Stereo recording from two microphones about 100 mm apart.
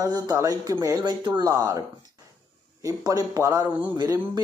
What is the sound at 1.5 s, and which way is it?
Speech, 35° right (ahead or behind).